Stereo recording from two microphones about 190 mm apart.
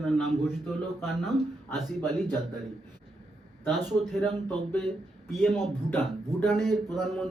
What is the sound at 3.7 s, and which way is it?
Speech, centre (ahead or behind).